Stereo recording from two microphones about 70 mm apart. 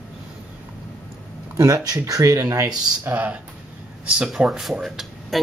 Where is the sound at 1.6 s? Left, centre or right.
Right.